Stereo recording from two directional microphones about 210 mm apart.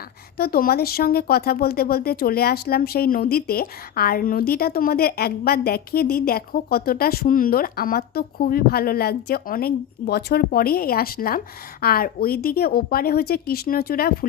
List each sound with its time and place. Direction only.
0.3 s speech: 45° left (ahead or behind)